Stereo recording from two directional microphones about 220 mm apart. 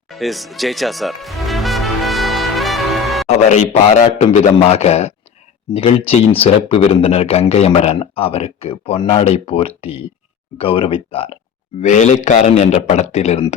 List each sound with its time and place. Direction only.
0.1 s music: centre (ahead or behind)
3.2 s speech: 30° left (ahead or behind)